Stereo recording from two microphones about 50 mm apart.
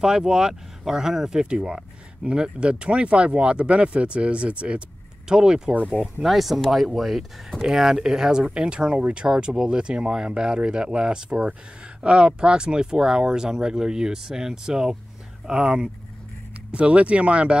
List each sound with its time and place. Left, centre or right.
0.0 s speech: centre
6.2 s speech: centre; by 17.6 s right